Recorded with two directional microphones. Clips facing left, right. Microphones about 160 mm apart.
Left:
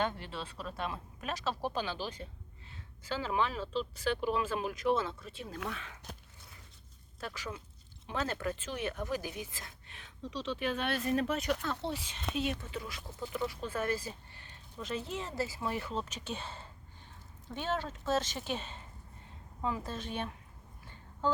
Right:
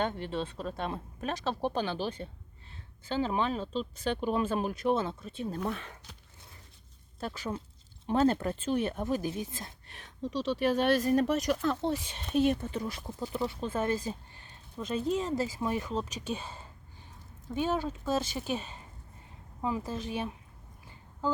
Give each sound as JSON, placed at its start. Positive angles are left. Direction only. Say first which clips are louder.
{"t": 0.0, "sound": "speech", "louder": "right 4 dB", "side_deg": -25}
{"t": 2.2, "sound": "speech", "louder": "right 5 dB", "side_deg": -45}
{"t": 3.2, "sound": "speech", "louder": "right 4 dB", "side_deg": -25}
{"t": 4.3, "sound": "speech", "louder": "right 3 dB", "side_deg": -40}
{"t": 4.9, "sound": "speech", "louder": "right 3 dB", "side_deg": -25}
{"t": 5.6, "sound": "speech", "louder": "right 6 dB", "side_deg": -45}
{"t": 7.3, "sound": "speech", "louder": "right 6 dB", "side_deg": -30}
{"t": 9.9, "sound": "a woman's voice", "louder": "right 7 dB", "side_deg": -45}